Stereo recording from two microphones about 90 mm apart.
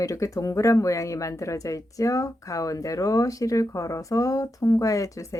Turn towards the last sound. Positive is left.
turn(degrees=40)  # may be behind; listen again after turning